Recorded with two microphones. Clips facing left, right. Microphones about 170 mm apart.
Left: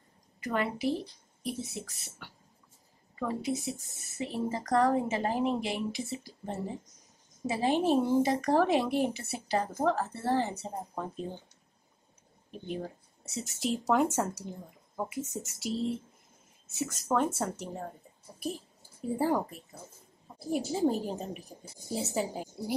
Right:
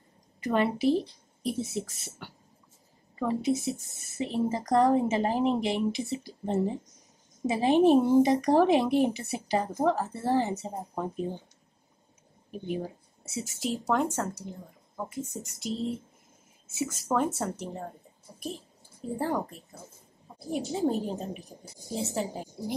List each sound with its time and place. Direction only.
0.4 s a woman's voice: 25° right (ahead or behind)
12.4 s speech: 10° right (ahead or behind)
15.0 s speech: 5° left (ahead or behind)